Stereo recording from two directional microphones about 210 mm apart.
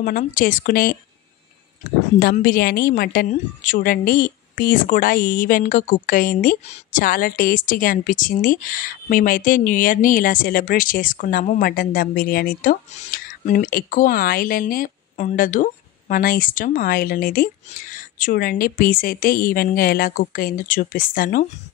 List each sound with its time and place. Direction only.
0.0 s a woman's voice: 40° left (ahead or behind)
2.1 s a woman's voice: 45° left (ahead or behind)